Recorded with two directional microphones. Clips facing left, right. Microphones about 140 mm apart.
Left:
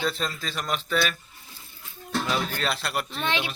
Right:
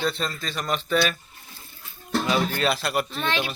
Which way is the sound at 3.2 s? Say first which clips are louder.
Right 2 dB; 20° left (ahead or behind).